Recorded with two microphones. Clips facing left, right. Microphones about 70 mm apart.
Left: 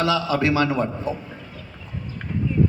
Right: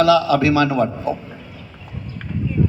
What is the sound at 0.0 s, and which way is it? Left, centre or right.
A man's voice, left.